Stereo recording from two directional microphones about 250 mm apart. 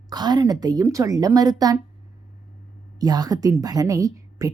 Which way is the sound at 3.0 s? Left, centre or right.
Centre.